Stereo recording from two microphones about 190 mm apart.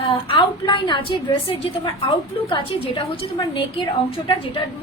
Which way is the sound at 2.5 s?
25° left (ahead or behind).